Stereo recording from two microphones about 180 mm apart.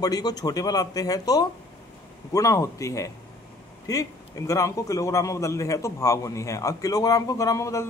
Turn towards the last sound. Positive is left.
turn(degrees=15)  # may be behind; listen again after turning